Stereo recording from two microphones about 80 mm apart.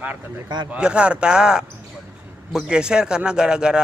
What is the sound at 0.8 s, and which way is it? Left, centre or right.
A man's voice, centre.